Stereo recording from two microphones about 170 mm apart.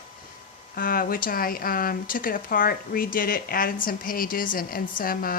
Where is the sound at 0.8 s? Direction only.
60° left (ahead or behind).